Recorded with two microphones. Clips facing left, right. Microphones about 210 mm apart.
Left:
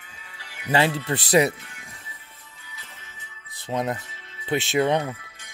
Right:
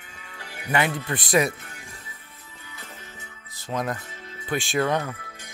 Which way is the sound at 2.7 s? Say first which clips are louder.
Right 6 dB; 50° right (ahead or behind).